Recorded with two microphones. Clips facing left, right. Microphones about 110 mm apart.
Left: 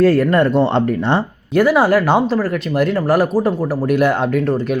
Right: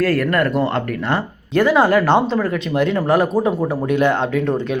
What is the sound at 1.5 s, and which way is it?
Speech, 5° left (ahead or behind).